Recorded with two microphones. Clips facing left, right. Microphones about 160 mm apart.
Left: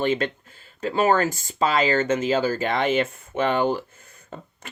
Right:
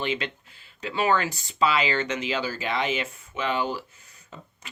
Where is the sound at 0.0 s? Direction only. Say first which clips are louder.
Left 6 dB; 45° left (ahead or behind).